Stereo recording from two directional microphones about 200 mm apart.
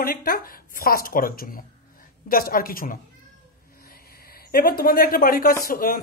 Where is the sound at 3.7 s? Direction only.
50° left (ahead or behind).